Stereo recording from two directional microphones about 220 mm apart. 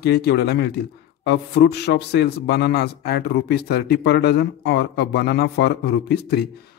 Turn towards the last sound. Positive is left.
turn(degrees=45)  # may be behind; listen again after turning